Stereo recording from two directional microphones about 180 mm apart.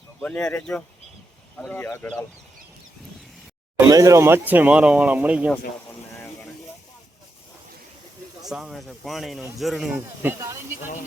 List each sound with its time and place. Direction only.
0.2 s speech: 5° left (ahead or behind)
3.8 s speech: 20° right (ahead or behind)
8.4 s speech: centre (ahead or behind)
10.2 s speech: 15° right (ahead or behind)